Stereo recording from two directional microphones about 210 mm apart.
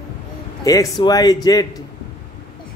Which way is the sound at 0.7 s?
15° left (ahead or behind).